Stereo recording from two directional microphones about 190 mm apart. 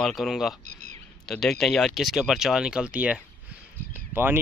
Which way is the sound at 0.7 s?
40° right (ahead or behind).